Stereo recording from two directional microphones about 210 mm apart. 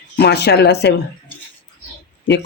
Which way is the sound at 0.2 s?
50° left (ahead or behind).